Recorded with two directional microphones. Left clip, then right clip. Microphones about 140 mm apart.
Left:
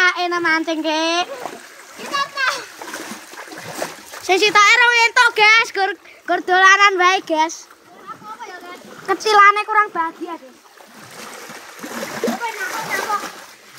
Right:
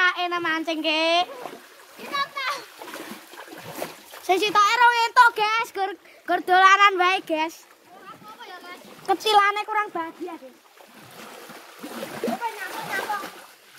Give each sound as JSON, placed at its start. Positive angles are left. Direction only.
{"t": 0.0, "sound": "a child's voice", "side_deg": -20}
{"t": 2.3, "sound": "splash", "side_deg": 10}
{"t": 4.3, "sound": "speech", "side_deg": -15}
{"t": 5.3, "sound": "a child's voice", "side_deg": 0}
{"t": 6.2, "sound": "a child's voice", "side_deg": -30}
{"t": 9.0, "sound": "speech", "side_deg": -50}
{"t": 11.1, "sound": "splash", "side_deg": 15}